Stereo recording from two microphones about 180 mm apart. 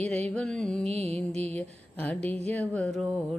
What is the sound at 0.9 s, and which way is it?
Mantra, 10° left (ahead or behind).